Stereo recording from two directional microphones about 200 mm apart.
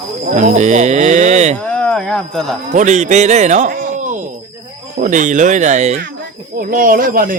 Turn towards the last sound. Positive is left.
turn(degrees=-45)  # may be behind; listen again after turning